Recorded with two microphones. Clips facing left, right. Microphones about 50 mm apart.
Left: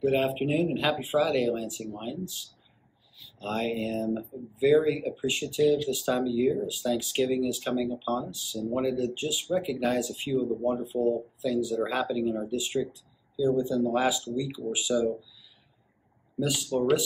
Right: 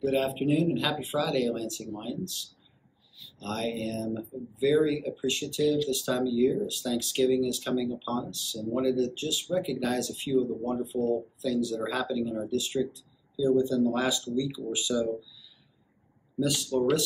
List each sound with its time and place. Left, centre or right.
0.0 s speech: centre